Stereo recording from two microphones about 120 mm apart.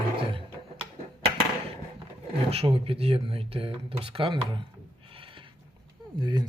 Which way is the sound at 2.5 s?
55° right (ahead or behind).